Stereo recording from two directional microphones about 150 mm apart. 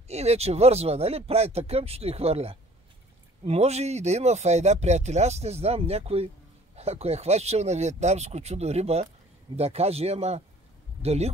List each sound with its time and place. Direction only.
0.1 s speech: 45° right (ahead or behind)